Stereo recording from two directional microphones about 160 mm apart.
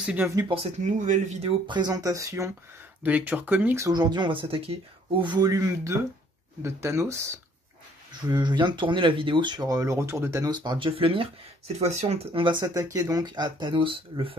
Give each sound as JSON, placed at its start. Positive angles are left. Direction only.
{"t": 0.0, "sound": "speech", "side_deg": -10}
{"t": 0.5, "sound": "speech", "side_deg": -40}
{"t": 1.7, "sound": "speech", "side_deg": -25}